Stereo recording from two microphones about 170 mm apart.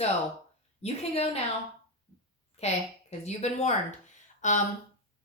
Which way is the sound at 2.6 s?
40° left (ahead or behind).